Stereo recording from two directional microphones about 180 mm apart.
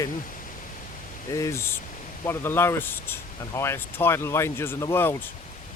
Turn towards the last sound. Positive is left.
turn(degrees=10)  # may be behind; listen again after turning